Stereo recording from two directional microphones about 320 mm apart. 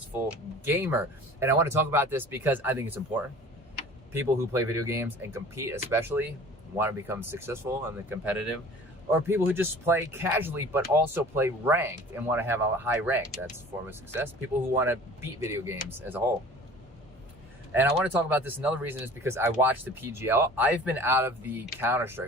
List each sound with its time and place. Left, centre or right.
0.1 s speech: centre
17.7 s speech: centre